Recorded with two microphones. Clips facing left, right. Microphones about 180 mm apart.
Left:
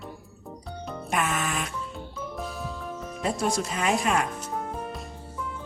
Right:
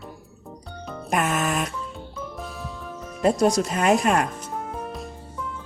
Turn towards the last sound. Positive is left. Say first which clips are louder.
# right 2 dB
turn(degrees=0)  # may be behind; listen again after turning